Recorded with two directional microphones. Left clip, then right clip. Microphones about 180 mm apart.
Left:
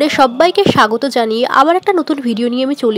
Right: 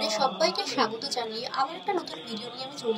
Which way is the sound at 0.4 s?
35° left (ahead or behind).